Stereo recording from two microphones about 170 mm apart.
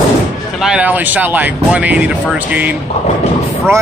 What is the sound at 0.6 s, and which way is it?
Speech, 5° right (ahead or behind).